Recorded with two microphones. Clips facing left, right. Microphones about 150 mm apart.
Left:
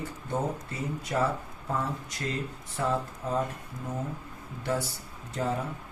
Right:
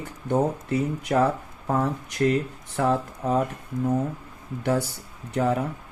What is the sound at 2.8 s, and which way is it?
Speech, 65° right (ahead or behind).